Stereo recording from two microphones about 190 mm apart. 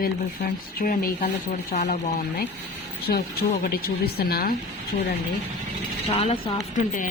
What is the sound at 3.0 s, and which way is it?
A woman's voice, 55° left (ahead or behind).